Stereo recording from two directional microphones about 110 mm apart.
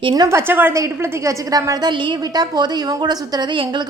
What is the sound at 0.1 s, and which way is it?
Speech, 35° right (ahead or behind).